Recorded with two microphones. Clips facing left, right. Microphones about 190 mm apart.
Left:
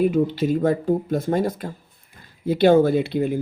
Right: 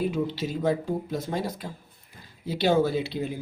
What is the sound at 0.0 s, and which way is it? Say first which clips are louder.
Speech: left 8 dB; 55° left (ahead or behind).